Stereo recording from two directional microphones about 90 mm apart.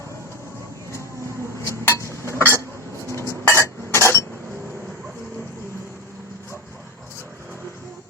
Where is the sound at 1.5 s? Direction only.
30° left (ahead or behind).